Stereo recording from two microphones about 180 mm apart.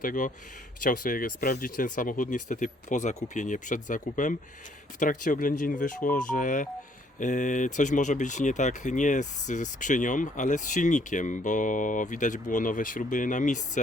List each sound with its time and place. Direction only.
0.0 s speech: 50° left (ahead or behind)